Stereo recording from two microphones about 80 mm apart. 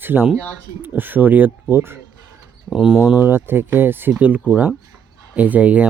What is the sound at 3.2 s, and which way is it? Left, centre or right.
Speech, right.